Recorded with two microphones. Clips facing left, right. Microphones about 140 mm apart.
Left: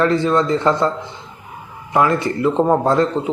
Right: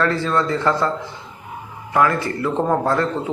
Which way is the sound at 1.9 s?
20° left (ahead or behind).